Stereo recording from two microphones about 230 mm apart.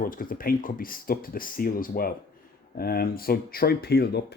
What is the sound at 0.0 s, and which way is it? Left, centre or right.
Speech, left.